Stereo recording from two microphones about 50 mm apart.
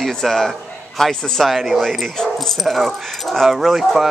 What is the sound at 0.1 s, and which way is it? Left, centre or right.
A man's voice, centre.